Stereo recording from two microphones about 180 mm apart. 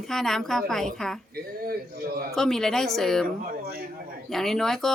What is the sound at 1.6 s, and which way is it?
Speech, 55° right (ahead or behind).